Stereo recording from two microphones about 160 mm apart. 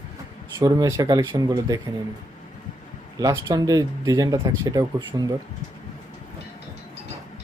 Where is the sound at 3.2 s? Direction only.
25° right (ahead or behind).